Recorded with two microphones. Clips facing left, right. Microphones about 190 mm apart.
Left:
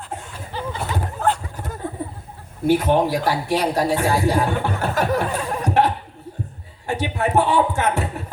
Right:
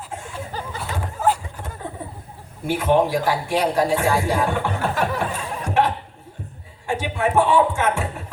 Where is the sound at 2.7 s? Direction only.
40° left (ahead or behind).